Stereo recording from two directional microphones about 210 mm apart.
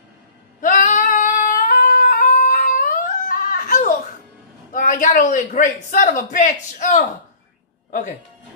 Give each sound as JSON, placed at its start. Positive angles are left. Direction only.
{"t": 0.6, "sound": "singing", "side_deg": 40}
{"t": 4.7, "sound": "a man's voice", "side_deg": 40}